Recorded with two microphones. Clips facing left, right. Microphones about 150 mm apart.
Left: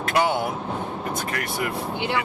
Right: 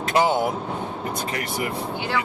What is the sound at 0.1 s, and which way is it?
Speech, 25° right (ahead or behind).